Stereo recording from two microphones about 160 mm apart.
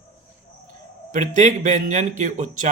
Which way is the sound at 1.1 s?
55° right (ahead or behind).